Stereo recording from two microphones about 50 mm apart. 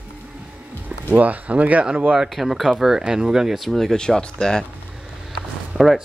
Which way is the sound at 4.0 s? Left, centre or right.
Centre.